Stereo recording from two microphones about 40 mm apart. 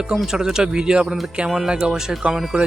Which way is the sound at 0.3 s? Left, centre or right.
Centre.